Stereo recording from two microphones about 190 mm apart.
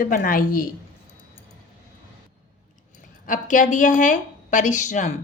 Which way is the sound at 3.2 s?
45° left (ahead or behind).